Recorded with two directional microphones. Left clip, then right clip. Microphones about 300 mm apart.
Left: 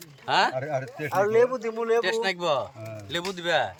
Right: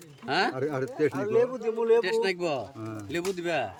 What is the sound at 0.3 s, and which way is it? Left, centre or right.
Speech, centre.